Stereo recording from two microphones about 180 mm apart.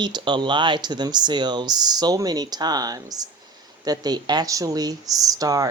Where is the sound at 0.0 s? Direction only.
25° right (ahead or behind).